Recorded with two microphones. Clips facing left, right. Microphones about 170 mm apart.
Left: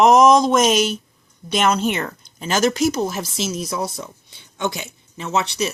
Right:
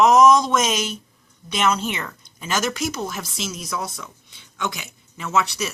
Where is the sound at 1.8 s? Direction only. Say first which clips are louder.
Left 6 dB; 45° left (ahead or behind).